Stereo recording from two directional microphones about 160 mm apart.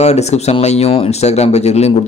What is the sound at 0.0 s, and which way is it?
A man's voice, 40° left (ahead or behind).